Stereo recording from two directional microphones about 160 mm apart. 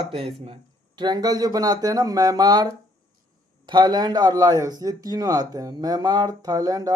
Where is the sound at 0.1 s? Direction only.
35° right (ahead or behind).